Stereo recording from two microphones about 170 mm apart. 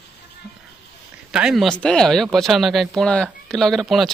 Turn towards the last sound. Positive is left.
turn(degrees=0)  # may be behind; listen again after turning